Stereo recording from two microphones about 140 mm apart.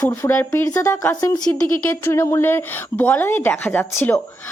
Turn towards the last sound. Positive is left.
turn(degrees=20)  # may be behind; listen again after turning